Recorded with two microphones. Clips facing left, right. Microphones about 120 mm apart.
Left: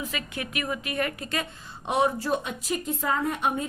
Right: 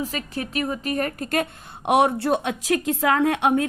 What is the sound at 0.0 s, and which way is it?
A woman's voice, 35° right (ahead or behind).